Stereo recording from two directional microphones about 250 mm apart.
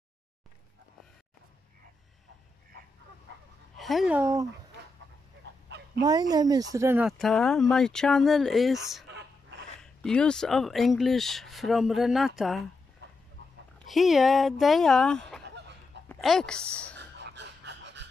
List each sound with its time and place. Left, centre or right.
3.7 s speech: centre
5.9 s speech: centre
9.1 s a sound: right
9.8 s speech: centre
13.8 s speech: centre
17.0 s dog: right